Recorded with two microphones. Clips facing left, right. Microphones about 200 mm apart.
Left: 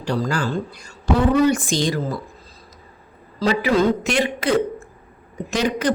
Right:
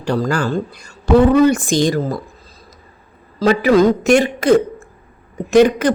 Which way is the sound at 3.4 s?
50° right (ahead or behind).